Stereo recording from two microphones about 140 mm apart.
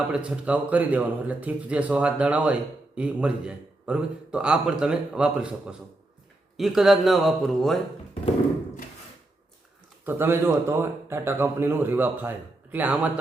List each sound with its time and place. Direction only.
0.1 s speech: 10° right (ahead or behind)
10.1 s speech: 15° right (ahead or behind)